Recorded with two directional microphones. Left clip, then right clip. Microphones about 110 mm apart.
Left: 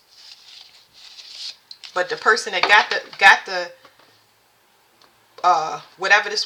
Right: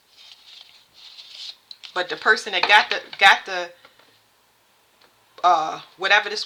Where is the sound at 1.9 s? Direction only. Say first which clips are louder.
Left 2 dB; 35° right (ahead or behind).